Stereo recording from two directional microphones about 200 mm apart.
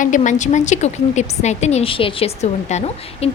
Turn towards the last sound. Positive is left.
turn(degrees=30)  # may be behind; listen again after turning